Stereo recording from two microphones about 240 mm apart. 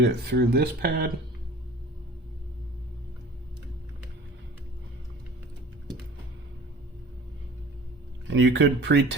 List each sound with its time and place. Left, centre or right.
0.0 s speech: right
8.3 s speech: right